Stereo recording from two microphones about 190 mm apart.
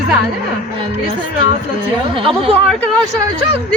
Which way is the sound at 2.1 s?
25° right (ahead or behind).